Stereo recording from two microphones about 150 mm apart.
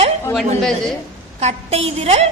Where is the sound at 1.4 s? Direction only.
45° right (ahead or behind).